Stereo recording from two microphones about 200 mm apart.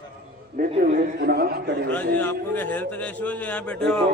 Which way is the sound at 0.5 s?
45° right (ahead or behind).